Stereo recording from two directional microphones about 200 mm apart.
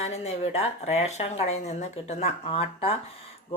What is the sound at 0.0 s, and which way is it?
Speech, 30° left (ahead or behind).